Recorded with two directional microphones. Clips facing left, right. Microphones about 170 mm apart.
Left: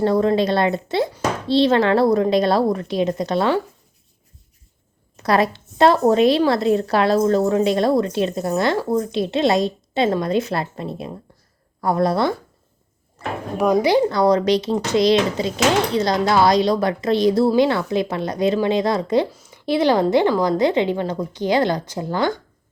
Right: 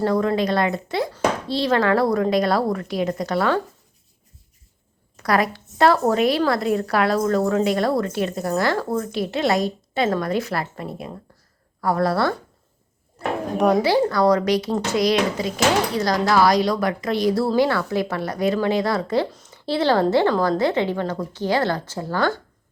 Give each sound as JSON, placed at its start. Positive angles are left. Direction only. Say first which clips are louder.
{"t": 0.0, "sound": "speech", "louder": "left 3 dB", "side_deg": 25}
{"t": 5.1, "sound": "speech", "louder": "left 3 dB", "side_deg": 25}
{"t": 13.6, "sound": "speech", "louder": "left 1 dB", "side_deg": 5}
{"t": 13.8, "sound": "a woman's voice", "louder": "left 2 dB", "side_deg": 20}